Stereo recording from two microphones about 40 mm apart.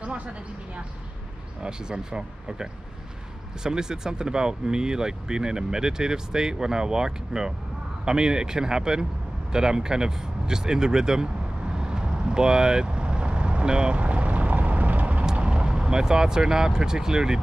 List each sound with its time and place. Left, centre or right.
0.0 s a sound: right
1.6 s speech: right
11.7 s vehicle: centre; by 15.2 s right
15.3 s speech: right